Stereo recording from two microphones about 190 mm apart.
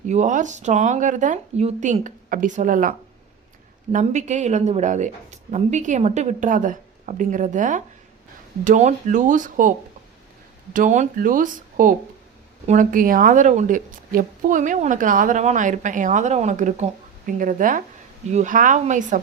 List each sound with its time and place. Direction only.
0.1 s a woman's voice: 40° right (ahead or behind)
3.9 s a woman's voice: 40° right (ahead or behind)
10.8 s a woman's voice: 40° right (ahead or behind)